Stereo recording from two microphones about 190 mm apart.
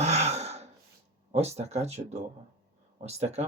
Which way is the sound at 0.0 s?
35° right (ahead or behind).